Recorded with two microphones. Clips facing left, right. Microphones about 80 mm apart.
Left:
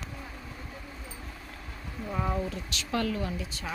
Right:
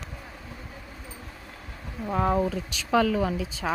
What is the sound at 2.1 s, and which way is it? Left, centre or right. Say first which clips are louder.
Speech: right 7 dB; right.